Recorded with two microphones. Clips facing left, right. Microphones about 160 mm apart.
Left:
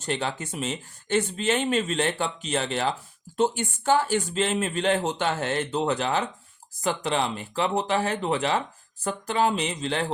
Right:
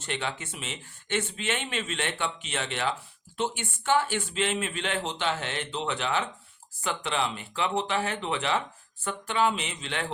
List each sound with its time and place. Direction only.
0.0 s speech: 40° left (ahead or behind)